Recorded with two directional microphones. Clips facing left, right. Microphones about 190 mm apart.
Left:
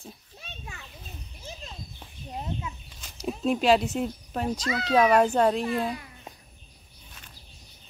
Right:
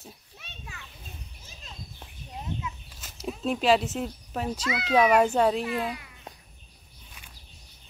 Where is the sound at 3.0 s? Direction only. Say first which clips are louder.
Left 3 dB; 5° right (ahead or behind).